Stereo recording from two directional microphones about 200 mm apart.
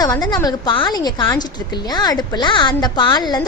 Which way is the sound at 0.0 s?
20° left (ahead or behind).